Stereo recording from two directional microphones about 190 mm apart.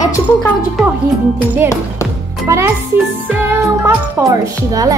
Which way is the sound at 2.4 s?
15° right (ahead or behind).